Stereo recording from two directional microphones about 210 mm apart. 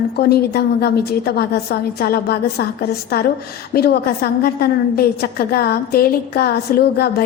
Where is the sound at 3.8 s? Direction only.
50° left (ahead or behind).